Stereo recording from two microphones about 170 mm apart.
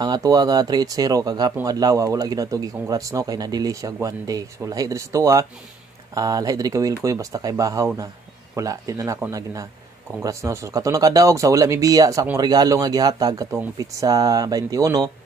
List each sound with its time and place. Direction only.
0.0 s speech: 20° right (ahead or behind)